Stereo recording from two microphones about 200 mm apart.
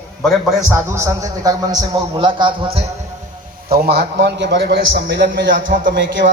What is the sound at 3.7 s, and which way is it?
A man's voice, 55° right (ahead or behind).